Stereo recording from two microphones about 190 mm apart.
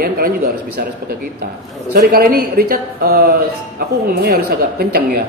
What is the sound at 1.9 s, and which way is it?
A man's voice, 50° right (ahead or behind).